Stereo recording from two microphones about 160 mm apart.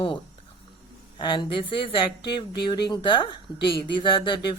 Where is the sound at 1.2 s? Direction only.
30° left (ahead or behind).